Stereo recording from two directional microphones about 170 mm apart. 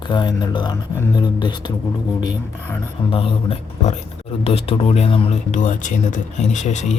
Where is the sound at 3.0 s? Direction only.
35° left (ahead or behind).